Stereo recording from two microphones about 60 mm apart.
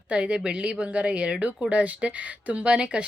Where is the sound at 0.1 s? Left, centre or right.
Right.